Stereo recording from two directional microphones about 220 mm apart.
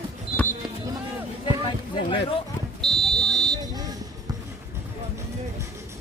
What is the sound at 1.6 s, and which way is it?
Run, 20° left (ahead or behind).